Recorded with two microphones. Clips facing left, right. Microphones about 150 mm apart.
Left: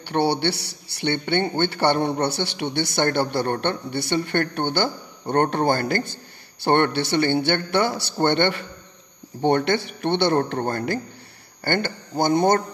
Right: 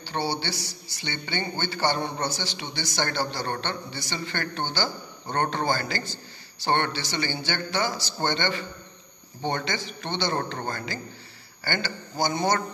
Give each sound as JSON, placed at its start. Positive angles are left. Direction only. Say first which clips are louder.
{"t": 0.0, "sound": "a man's voice", "louder": "left 8 dB", "side_deg": 65}